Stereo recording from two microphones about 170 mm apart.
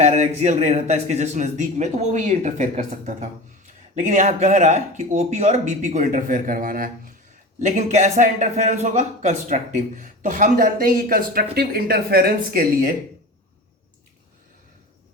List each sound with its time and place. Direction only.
0.0 s speech: 40° right (ahead or behind)
7.6 s speech: 45° right (ahead or behind); by 12.9 s 60° right (ahead or behind)